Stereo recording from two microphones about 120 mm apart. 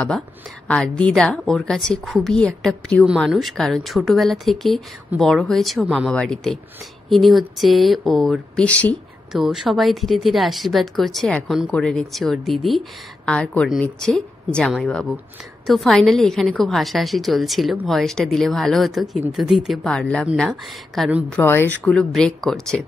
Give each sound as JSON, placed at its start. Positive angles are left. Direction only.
{"t": 0.7, "sound": "a woman's voice", "side_deg": 10}
{"t": 9.3, "sound": "a woman's voice", "side_deg": -5}
{"t": 21.3, "sound": "speech", "side_deg": 15}
{"t": 21.8, "sound": "a woman's voice", "side_deg": 5}